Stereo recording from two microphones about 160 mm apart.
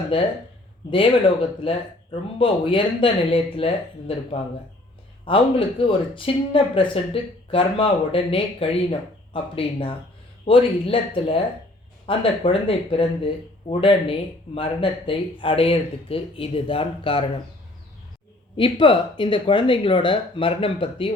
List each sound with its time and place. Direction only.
0.1 s speech: 35° left (ahead or behind)
18.5 s speech: 30° left (ahead or behind)